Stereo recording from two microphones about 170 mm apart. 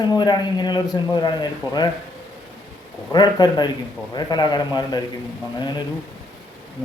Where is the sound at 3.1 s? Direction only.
25° left (ahead or behind).